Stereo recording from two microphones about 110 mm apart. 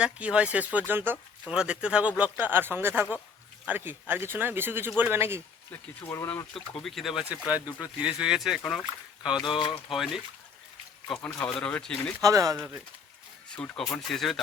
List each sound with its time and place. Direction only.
0.0 s speech: 10° right (ahead or behind)
1.5 s speech: 10° right (ahead or behind)
6.0 s speech: 20° left (ahead or behind)
6.8 s speech: centre (ahead or behind)
9.4 s speech: 45° left (ahead or behind)
9.9 s speech: 5° right (ahead or behind)
12.2 s speech: 35° right (ahead or behind)
12.5 s speech: 15° right (ahead or behind)
13.5 s speech: 5° left (ahead or behind)